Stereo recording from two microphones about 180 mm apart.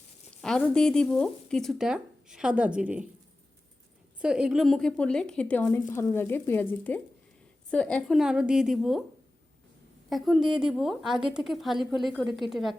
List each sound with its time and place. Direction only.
0.4 s speech: 5° left (ahead or behind)
4.2 s speech: 5° right (ahead or behind)
10.1 s speech: centre (ahead or behind)